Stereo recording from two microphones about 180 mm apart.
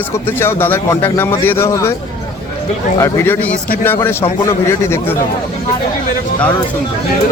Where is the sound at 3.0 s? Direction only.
15° left (ahead or behind).